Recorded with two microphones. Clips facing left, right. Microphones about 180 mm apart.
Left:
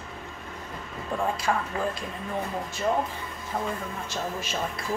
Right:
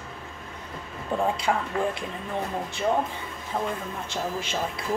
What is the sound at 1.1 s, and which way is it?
Speech, 20° right (ahead or behind).